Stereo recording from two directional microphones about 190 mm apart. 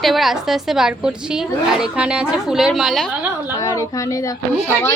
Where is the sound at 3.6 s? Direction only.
20° left (ahead or behind).